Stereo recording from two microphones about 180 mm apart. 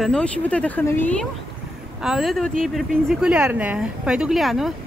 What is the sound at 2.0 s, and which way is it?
Speech, centre (ahead or behind).